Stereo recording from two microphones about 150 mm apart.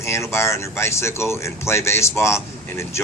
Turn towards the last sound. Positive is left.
turn(degrees=20)  # may be behind; listen again after turning